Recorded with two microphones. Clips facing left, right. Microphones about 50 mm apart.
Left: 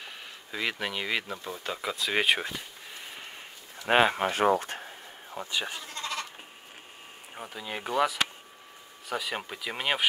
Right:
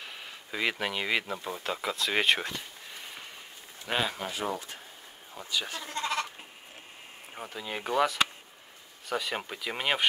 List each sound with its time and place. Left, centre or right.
0.0 s speech: centre
3.8 s speech: left
5.3 s speech: left
7.3 s speech: centre